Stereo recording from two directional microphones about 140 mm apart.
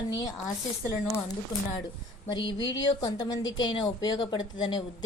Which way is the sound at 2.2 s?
35° left (ahead or behind).